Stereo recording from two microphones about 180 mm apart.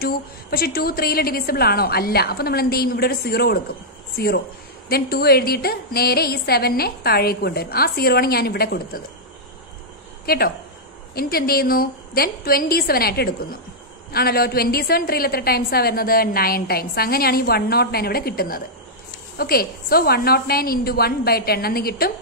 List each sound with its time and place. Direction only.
0.0 s a woman's voice: 60° left (ahead or behind)
4.8 s a woman's voice: 60° left (ahead or behind)
10.2 s a woman's voice: 55° left (ahead or behind)